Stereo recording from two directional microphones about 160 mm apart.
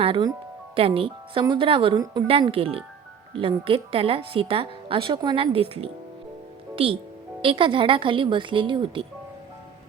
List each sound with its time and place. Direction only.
0.0 s speech: 35° right (ahead or behind)